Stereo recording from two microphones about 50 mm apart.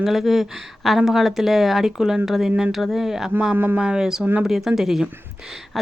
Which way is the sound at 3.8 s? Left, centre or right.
Centre.